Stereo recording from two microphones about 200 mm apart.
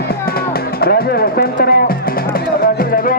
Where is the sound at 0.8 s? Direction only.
50° left (ahead or behind).